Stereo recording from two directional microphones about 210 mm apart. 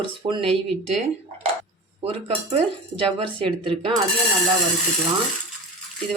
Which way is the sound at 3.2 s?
25° right (ahead or behind).